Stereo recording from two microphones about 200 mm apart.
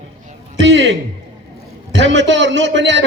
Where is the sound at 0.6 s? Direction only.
65° right (ahead or behind).